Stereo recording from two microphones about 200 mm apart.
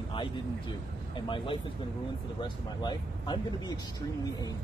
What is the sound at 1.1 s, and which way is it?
Speech, 25° left (ahead or behind).